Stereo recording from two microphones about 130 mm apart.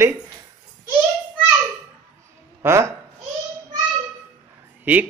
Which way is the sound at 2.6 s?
20° right (ahead or behind).